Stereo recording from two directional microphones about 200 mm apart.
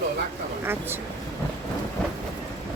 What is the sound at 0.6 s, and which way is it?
Speech, 10° right (ahead or behind).